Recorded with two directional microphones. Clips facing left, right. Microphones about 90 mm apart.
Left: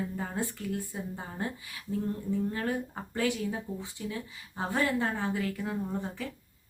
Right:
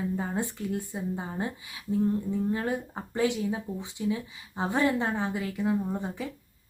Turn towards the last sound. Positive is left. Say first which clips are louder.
# right 2 dB
turn(degrees=-15)  # may be behind; listen again after turning